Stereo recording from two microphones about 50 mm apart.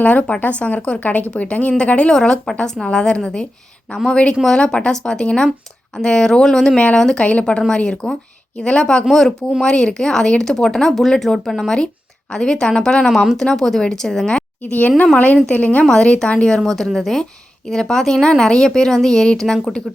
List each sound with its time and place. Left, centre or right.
0.0 s a woman's voice: left
2.1 s a woman's voice: centre
7.3 s a woman's voice: left
9.0 s speech: centre
14.6 s a woman's voice: left
15.9 s a woman's voice: centre
16.6 s speech: centre